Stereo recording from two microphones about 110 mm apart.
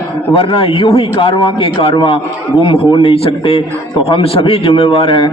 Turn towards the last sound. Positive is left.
turn(degrees=50)  # may be behind; listen again after turning